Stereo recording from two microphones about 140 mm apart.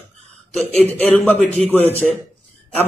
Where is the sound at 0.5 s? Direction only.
10° left (ahead or behind).